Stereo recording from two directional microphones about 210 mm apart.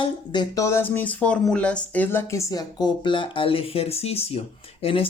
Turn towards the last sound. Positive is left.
turn(degrees=25)  # may be behind; listen again after turning